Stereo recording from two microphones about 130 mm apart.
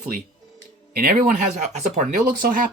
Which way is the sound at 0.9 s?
85° right.